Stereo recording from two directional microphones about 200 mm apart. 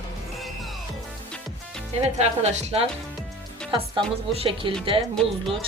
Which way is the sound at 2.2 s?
35° right (ahead or behind).